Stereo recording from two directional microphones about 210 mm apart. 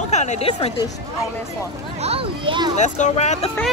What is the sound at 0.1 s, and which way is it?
Speech, 35° left (ahead or behind).